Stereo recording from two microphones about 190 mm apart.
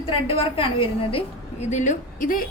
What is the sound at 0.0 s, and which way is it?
A woman's voice, 30° left (ahead or behind).